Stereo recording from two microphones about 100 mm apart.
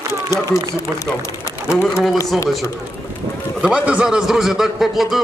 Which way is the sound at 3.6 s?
10° right (ahead or behind).